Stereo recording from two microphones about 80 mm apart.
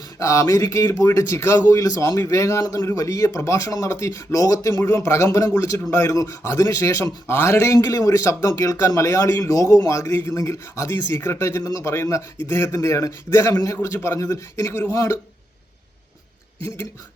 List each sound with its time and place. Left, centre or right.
0.2 s a man's voice: left
16.6 s a man's voice: left